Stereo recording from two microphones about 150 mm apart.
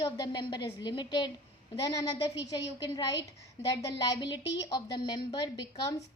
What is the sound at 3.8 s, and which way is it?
A woman's voice, 25° left (ahead or behind).